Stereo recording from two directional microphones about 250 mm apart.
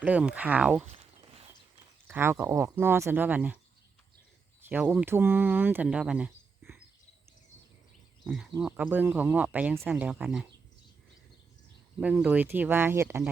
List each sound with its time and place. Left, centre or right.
0.0 s speech: centre
0.9 s a sound: right
2.0 s speech: centre
4.7 s speech: centre
8.2 s speech: centre
11.9 s speech: centre